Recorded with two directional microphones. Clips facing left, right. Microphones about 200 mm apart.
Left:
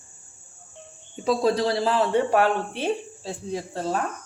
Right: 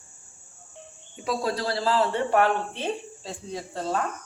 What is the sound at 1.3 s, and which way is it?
A man's voice, 20° left (ahead or behind).